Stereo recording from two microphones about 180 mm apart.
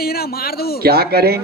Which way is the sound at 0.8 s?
60° right (ahead or behind).